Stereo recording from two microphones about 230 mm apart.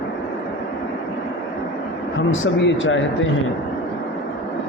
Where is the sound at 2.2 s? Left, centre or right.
Left.